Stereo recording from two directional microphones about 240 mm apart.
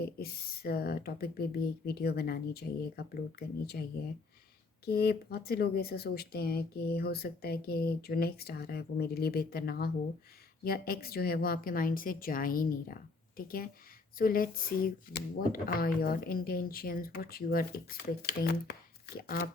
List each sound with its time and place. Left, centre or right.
0.0 s speech: left
4.9 s speech: left